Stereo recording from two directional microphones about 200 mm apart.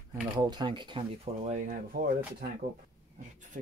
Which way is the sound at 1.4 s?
40° right (ahead or behind).